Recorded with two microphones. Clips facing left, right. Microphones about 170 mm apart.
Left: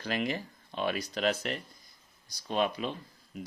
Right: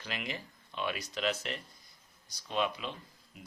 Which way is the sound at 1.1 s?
50° left (ahead or behind).